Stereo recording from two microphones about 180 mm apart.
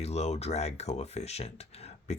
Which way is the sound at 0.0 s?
35° left (ahead or behind).